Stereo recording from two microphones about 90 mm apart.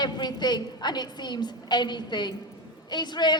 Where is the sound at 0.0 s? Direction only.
50° left (ahead or behind).